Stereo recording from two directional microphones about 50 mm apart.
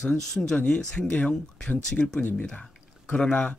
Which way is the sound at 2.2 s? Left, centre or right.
Left.